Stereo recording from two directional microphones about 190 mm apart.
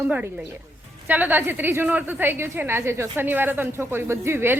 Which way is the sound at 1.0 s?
10° right (ahead or behind).